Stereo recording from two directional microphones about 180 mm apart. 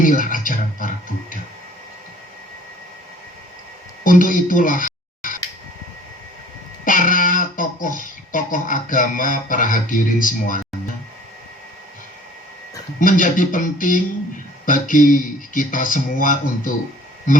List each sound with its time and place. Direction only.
0.0 s speech: 50° left (ahead or behind)
4.0 s a sound: 50° left (ahead or behind)
6.8 s speech: 50° left (ahead or behind)
13.0 s speech: 50° left (ahead or behind)